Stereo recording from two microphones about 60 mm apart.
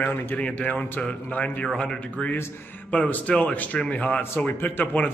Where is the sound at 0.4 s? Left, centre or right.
Left.